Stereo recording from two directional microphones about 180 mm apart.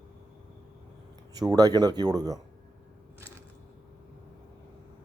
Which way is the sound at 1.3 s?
20° right (ahead or behind).